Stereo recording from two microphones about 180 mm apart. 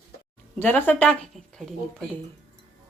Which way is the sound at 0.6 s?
10° left (ahead or behind).